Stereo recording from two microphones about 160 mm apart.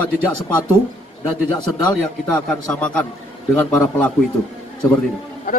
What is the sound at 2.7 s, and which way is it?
Speech, 10° left (ahead or behind).